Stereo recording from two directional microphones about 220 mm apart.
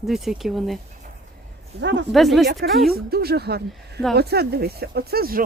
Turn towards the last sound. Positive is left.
turn(degrees=-40)  # may be behind; listen again after turning